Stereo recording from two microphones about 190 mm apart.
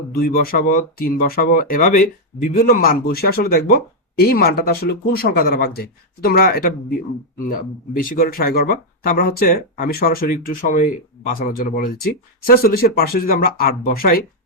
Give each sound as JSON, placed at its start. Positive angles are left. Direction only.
{"t": 0.2, "sound": "speech", "side_deg": 50}
{"t": 7.9, "sound": "speech", "side_deg": 50}